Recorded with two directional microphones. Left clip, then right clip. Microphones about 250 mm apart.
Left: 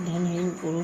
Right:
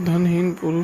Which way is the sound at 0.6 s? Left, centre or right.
Right.